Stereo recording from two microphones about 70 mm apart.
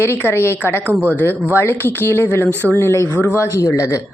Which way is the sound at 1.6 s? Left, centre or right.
Left.